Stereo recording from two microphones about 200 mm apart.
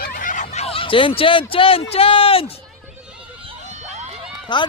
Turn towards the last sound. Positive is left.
turn(degrees=25)  # may be behind; listen again after turning